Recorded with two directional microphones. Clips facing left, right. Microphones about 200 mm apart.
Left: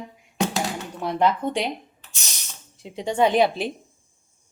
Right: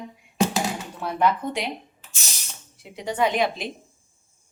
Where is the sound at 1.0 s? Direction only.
25° left (ahead or behind).